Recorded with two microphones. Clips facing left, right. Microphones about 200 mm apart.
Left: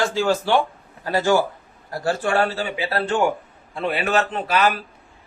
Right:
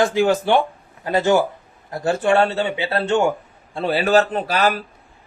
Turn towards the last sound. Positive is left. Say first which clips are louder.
# right 1 dB
turn(degrees=-35)  # may be behind; listen again after turning